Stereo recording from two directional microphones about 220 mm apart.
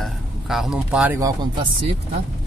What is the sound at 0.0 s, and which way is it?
Speech, centre (ahead or behind).